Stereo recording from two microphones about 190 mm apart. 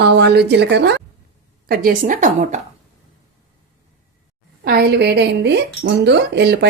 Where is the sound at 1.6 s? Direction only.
50° right (ahead or behind).